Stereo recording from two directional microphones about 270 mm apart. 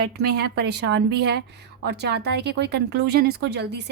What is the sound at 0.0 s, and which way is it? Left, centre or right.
Speech, right.